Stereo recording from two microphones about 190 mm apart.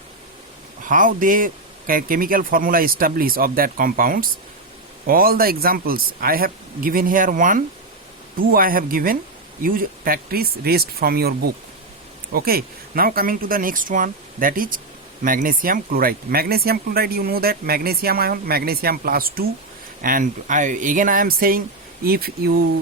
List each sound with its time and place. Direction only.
0.9 s speech: 45° right (ahead or behind)